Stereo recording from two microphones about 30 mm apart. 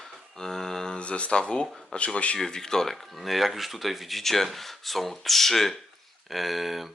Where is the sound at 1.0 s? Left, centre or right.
Left.